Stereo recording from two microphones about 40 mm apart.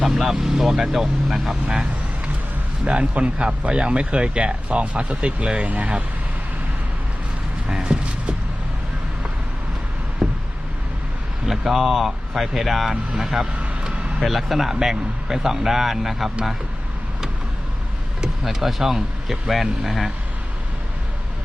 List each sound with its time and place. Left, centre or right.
0.0 s speech: centre
1.6 s speech: right
7.7 s a sound: centre
10.2 s a sound: centre
11.4 s speech: centre
13.1 s speech: centre
14.2 s speech: centre
18.2 s speech: centre